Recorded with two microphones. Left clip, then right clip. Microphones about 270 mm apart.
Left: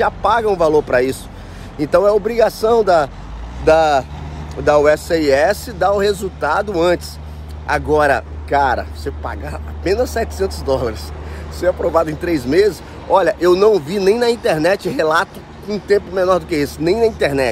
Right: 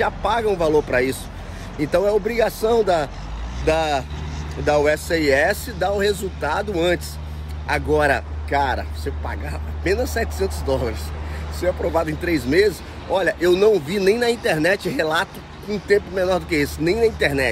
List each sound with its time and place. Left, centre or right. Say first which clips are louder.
0.0 s speech: left 5 dB; centre